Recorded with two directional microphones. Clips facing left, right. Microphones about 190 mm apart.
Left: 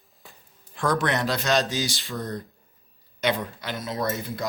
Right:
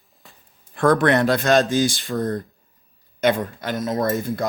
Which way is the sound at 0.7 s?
55° right (ahead or behind).